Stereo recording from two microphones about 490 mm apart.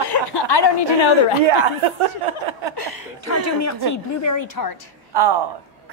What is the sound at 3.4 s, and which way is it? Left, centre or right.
A woman's voice, left.